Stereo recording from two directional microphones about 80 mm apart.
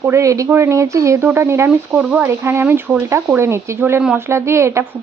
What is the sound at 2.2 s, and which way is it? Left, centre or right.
Speech, right.